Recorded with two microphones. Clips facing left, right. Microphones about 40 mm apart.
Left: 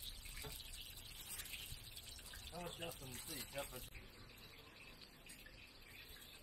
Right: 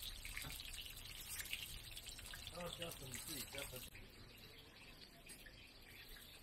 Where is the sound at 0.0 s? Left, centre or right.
Right.